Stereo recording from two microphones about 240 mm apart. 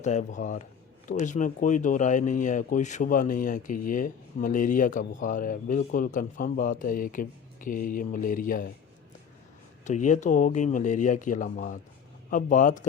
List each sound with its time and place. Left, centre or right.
0.0 s speech: left
9.8 s speech: left